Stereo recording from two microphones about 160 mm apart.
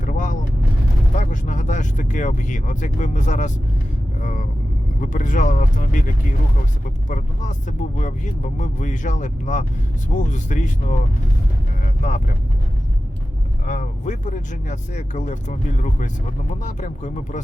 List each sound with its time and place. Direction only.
0.0 s vehicle: 55° left (ahead or behind)
1.1 s speech: 55° left (ahead or behind)
13.7 s speech: 50° left (ahead or behind)